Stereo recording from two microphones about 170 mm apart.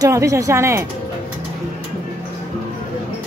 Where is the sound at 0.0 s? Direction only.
20° right (ahead or behind).